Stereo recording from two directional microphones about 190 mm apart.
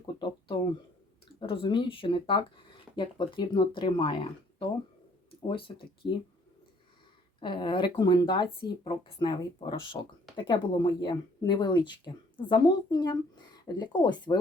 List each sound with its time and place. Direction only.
0.0 s a sound: 25° left (ahead or behind)
1.4 s speech: 25° left (ahead or behind)
5.5 s speech: 25° left (ahead or behind)
7.3 s speech: 25° left (ahead or behind)